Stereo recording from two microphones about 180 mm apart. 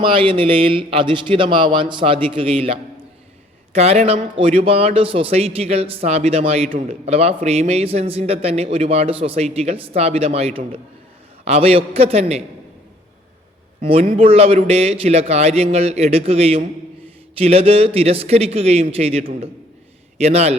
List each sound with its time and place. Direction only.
0.0 s a man's voice: 30° right (ahead or behind)
13.8 s a man's voice: 30° right (ahead or behind)